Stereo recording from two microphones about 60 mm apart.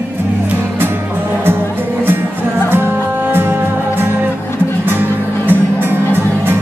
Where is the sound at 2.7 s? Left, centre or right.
Right.